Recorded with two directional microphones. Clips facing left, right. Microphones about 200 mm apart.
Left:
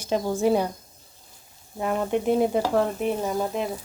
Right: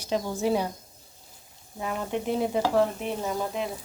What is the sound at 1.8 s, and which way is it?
Speech, 50° left (ahead or behind).